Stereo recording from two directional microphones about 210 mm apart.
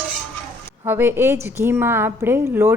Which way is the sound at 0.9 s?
10° right (ahead or behind).